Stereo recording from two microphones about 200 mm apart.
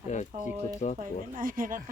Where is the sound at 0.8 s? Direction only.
35° left (ahead or behind).